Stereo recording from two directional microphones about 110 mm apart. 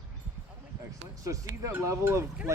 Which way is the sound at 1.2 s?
30° right (ahead or behind).